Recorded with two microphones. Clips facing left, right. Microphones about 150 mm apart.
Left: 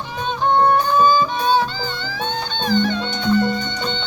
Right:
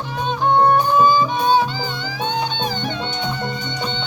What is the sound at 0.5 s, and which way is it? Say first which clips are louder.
Music: right 1 dB; 10° right (ahead or behind).